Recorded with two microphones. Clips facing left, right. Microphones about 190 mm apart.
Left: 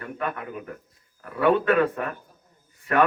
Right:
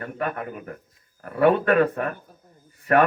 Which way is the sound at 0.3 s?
50° right (ahead or behind).